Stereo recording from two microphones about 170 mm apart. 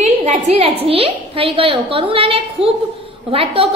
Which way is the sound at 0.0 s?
40° right (ahead or behind).